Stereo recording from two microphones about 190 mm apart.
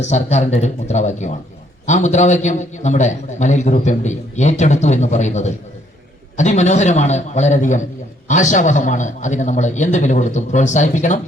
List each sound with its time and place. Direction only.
0.0 s a man's voice: 35° left (ahead or behind)